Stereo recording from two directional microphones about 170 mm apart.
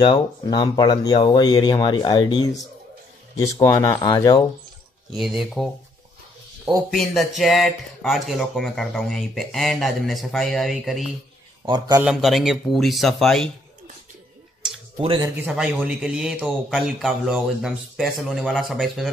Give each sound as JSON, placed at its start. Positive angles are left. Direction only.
{"t": 0.0, "sound": "speech", "side_deg": 30}
{"t": 3.6, "sound": "speech", "side_deg": 20}
{"t": 5.1, "sound": "speech", "side_deg": 0}
{"t": 6.9, "sound": "speech", "side_deg": 0}
{"t": 15.0, "sound": "speech", "side_deg": -30}
{"t": 15.2, "sound": "speech", "side_deg": -5}